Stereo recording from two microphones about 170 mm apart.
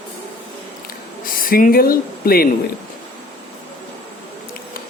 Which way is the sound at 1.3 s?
55° left (ahead or behind).